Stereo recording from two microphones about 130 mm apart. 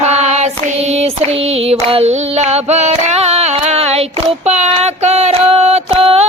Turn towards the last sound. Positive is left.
turn(degrees=-50)  # may be behind; listen again after turning